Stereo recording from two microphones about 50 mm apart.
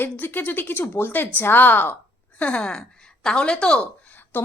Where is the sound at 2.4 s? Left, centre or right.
Centre.